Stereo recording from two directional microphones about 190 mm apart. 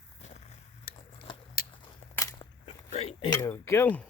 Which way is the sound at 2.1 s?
20° left (ahead or behind).